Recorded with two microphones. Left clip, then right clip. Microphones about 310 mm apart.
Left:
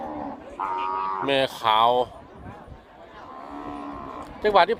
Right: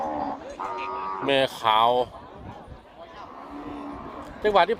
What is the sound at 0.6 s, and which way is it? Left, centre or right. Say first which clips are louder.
Cattle: left 5 dB; centre.